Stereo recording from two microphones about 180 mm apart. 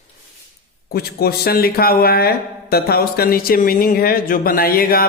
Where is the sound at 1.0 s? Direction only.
60° left (ahead or behind).